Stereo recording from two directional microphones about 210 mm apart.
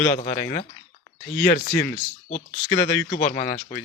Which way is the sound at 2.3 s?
30° left (ahead or behind).